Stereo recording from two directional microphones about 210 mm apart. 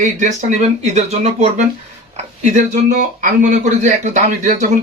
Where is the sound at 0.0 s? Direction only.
35° right (ahead or behind).